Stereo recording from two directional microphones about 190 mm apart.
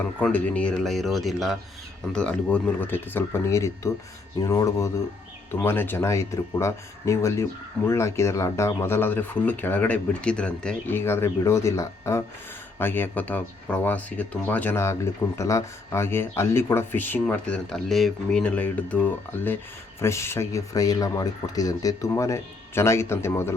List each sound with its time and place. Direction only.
0.0 s speech: 10° left (ahead or behind)